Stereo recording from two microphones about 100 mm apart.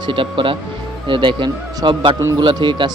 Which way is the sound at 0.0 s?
60° right (ahead or behind).